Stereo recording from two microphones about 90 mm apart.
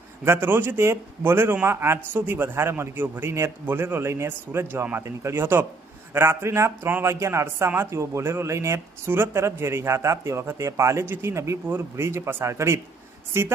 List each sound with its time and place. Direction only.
0.3 s a man's voice: 25° right (ahead or behind)